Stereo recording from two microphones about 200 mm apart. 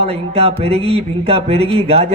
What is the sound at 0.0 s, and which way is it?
A man's voice, 30° right (ahead or behind).